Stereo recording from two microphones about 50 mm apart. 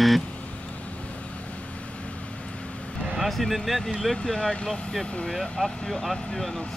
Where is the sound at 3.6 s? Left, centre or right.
Centre.